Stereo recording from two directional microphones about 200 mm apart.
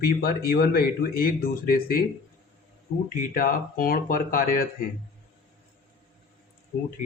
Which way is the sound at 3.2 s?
45° left (ahead or behind).